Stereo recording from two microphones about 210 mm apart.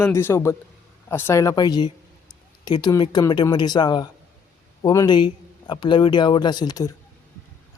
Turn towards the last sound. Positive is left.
turn(degrees=20)  # may be behind; listen again after turning